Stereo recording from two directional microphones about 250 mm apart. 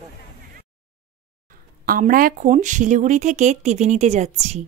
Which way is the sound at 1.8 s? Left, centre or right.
Right.